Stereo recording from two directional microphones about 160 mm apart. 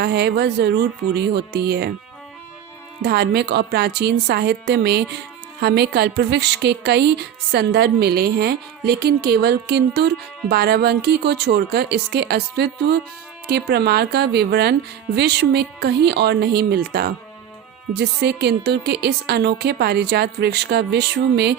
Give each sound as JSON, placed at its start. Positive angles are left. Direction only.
{"t": 0.0, "sound": "a woman's voice", "side_deg": -90}
{"t": 3.0, "sound": "a woman's voice", "side_deg": -90}
{"t": 17.9, "sound": "a woman's voice", "side_deg": -90}